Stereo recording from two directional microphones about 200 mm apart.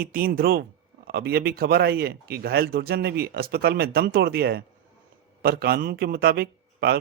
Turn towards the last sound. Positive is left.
turn(degrees=-50)  # may be behind; listen again after turning